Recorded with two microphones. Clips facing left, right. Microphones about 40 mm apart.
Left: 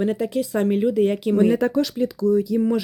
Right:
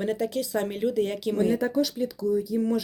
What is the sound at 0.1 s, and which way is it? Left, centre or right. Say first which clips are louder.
Speech: left 4 dB; left.